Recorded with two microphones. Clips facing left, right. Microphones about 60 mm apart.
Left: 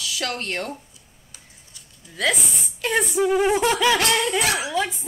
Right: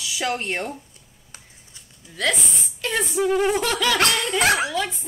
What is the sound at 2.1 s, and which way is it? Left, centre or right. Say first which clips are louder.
Speech: left 1 dB; centre.